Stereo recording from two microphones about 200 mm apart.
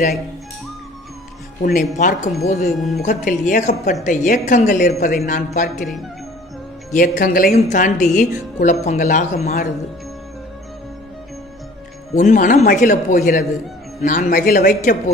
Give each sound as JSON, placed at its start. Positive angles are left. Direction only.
{"t": 1.6, "sound": "speech", "side_deg": 40}
{"t": 4.8, "sound": "speech", "side_deg": 50}
{"t": 6.9, "sound": "speech", "side_deg": 45}
{"t": 12.1, "sound": "speech", "side_deg": 40}